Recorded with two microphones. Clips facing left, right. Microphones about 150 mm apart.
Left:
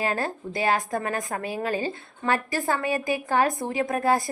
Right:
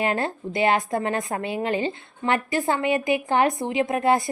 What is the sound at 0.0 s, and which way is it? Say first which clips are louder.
A woman's voice: right 3 dB; 25° right (ahead or behind).